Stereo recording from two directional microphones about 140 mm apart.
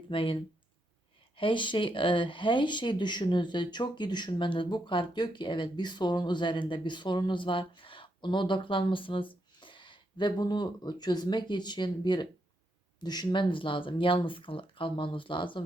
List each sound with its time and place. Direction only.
0.1 s speech: 40° left (ahead or behind)
1.4 s speech: 35° left (ahead or behind)